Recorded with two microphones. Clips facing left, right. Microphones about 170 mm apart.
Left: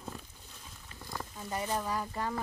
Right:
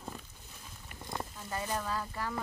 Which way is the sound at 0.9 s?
25° right (ahead or behind).